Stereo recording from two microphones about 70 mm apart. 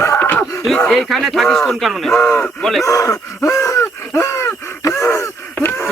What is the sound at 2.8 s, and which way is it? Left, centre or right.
Gasp, left.